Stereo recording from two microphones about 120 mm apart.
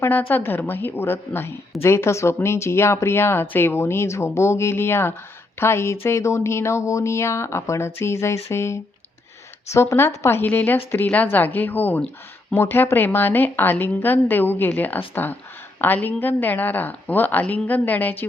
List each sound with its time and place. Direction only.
0.0 s a woman's voice: 15° left (ahead or behind)